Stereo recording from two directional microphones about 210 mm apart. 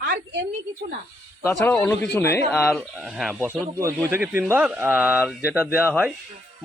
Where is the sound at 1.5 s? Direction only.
5° left (ahead or behind).